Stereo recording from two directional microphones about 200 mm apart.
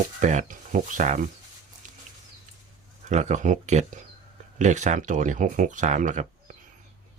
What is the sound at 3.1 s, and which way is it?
Speech, 35° right (ahead or behind).